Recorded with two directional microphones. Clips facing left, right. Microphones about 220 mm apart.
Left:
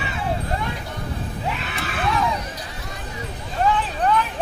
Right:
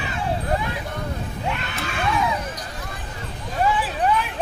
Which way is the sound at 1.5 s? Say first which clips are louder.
Even; centre (ahead or behind).